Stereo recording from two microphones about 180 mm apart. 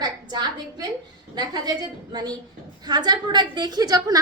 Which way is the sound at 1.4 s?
20° right (ahead or behind).